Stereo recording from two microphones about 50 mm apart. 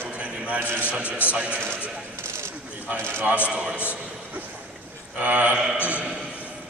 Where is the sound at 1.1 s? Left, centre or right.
Left.